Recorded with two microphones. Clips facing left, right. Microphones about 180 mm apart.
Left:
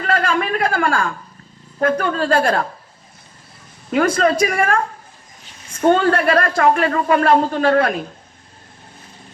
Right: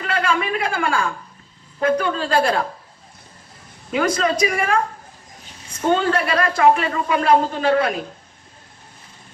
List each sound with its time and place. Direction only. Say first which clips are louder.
0.0 s a sound: left 2 dB; 45° left (ahead or behind)
1.8 s speech: left 1 dB; 50° left (ahead or behind)
3.9 s speech: left 4 dB; 50° left (ahead or behind)
5.9 s speech: left 4 dB; 55° left (ahead or behind)